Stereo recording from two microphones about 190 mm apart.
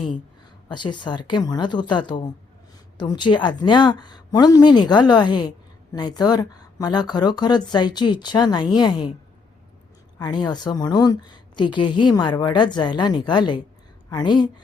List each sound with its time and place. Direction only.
0.7 s speech: 25° left (ahead or behind)
10.2 s speech: 20° left (ahead or behind)